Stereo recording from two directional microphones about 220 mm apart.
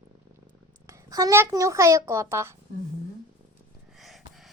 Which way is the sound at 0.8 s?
15° right (ahead or behind).